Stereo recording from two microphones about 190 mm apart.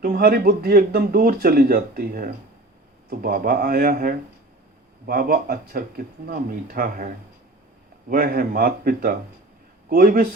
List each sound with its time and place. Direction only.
0.0 s speech: 50° right (ahead or behind)
8.1 s speech: 50° right (ahead or behind)